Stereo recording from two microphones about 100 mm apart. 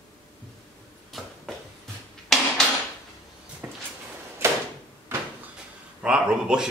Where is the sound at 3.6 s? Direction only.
20° right (ahead or behind).